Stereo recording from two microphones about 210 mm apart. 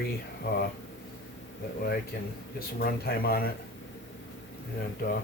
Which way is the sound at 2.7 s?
45° left (ahead or behind).